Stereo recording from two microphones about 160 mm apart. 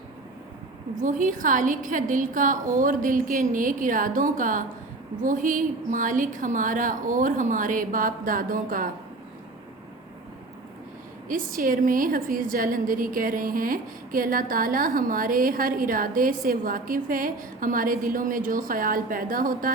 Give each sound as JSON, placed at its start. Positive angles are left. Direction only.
{"t": 1.0, "sound": "a woman's voice", "side_deg": -55}
{"t": 11.3, "sound": "a woman's voice", "side_deg": -60}